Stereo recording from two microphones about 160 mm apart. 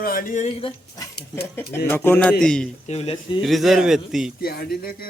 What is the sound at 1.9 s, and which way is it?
Speech, 10° left (ahead or behind).